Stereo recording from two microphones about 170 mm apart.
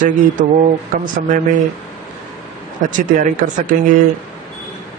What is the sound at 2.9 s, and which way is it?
Speech, 50° right (ahead or behind).